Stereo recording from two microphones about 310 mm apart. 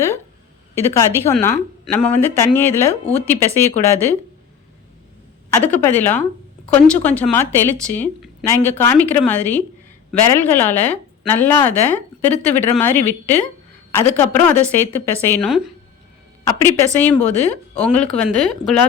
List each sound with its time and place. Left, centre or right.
0.8 s a woman's voice: centre
5.6 s a woman's voice: centre
16.4 s speech: centre